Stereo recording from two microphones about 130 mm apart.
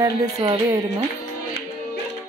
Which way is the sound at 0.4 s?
40° right (ahead or behind).